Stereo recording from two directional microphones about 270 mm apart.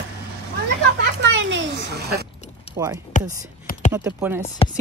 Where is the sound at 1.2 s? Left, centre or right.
Right.